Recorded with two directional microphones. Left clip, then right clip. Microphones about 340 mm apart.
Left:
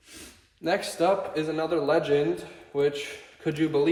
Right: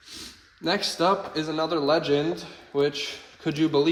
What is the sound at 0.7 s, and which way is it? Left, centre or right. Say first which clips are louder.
A man's voice: right 1 dB; centre.